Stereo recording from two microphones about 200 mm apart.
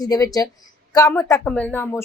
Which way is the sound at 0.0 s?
20° left (ahead or behind).